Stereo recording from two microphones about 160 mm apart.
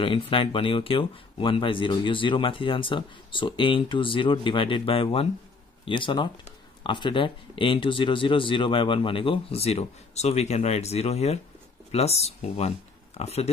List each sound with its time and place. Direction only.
0.0 s speech: 35° left (ahead or behind)